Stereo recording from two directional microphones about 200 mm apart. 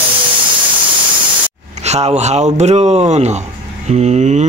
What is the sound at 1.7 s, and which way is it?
Speech, 35° right (ahead or behind).